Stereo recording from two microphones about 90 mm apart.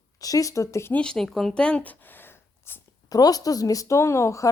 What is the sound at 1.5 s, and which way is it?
Speech, 10° left (ahead or behind).